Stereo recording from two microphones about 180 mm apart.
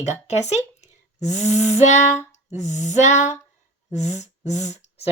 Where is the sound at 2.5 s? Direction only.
40° left (ahead or behind).